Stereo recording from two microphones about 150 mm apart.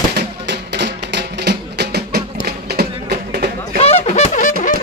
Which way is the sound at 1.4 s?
90° right.